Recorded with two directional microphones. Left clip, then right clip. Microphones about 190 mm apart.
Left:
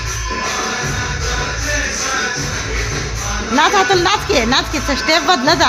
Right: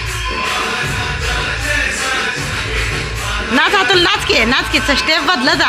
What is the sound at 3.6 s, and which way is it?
Speech, 10° left (ahead or behind).